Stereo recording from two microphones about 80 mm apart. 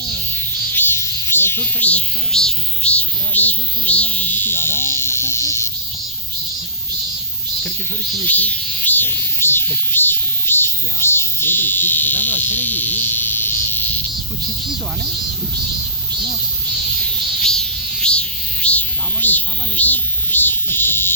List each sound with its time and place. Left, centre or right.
0.7 s insect: left
2.3 s speech: centre; by 5.7 s left
8.2 s insect: left
17.4 s a sound: centre; by 21.1 s left